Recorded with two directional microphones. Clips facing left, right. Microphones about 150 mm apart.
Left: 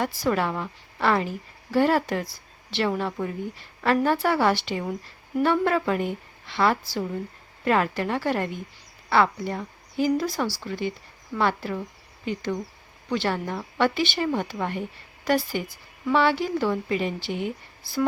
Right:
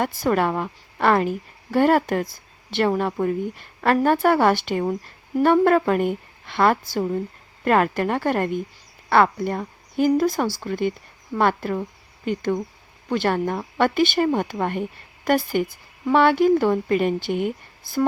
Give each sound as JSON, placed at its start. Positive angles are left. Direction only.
{"t": 0.0, "sound": "speech", "side_deg": -50}